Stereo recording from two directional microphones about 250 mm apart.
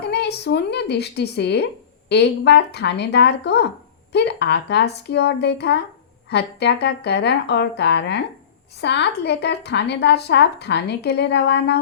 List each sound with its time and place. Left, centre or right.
0.0 s a woman's voice: left